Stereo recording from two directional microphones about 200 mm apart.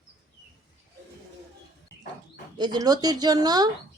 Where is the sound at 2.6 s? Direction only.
20° right (ahead or behind).